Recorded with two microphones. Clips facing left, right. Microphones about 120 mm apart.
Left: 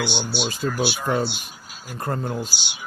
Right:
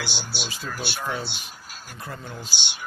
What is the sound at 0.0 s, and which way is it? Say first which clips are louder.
Speech: left 8 dB; centre (ahead or behind).